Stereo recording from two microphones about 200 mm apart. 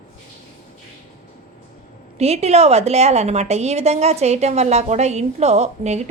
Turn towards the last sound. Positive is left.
turn(degrees=-35)  # may be behind; listen again after turning